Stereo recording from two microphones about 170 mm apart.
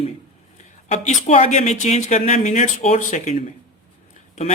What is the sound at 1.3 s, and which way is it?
Speech, 40° left (ahead or behind).